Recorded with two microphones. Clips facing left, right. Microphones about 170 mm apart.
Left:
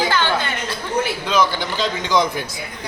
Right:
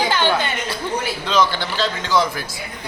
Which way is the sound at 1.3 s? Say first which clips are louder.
Right 3 dB; 10° left (ahead or behind).